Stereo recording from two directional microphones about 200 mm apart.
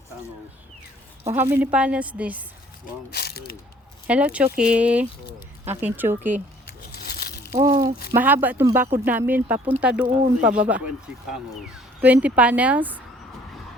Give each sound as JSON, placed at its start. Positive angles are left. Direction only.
{"t": 1.3, "sound": "speech", "side_deg": -10}
{"t": 3.1, "sound": "speech", "side_deg": 50}
{"t": 4.0, "sound": "speech", "side_deg": -5}
{"t": 7.0, "sound": "crumpling", "side_deg": 50}
{"t": 7.5, "sound": "speech", "side_deg": -20}
{"t": 8.1, "sound": "speech", "side_deg": -10}
{"t": 12.0, "sound": "speech", "side_deg": -5}